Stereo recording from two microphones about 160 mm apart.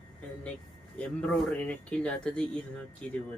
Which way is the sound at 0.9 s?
5° left (ahead or behind).